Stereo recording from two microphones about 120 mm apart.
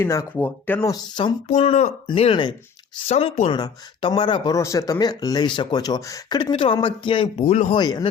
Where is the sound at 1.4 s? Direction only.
60° left (ahead or behind).